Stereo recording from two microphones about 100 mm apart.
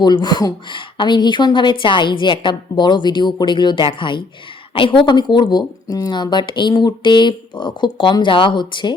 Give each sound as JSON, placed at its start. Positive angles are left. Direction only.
{"t": 0.0, "sound": "a woman's voice", "side_deg": 45}